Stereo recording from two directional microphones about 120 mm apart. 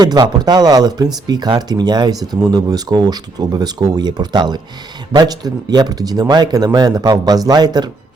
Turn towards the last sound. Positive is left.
turn(degrees=-35)  # may be behind; listen again after turning